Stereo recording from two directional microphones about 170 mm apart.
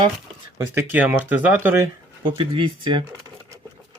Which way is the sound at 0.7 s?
10° right (ahead or behind).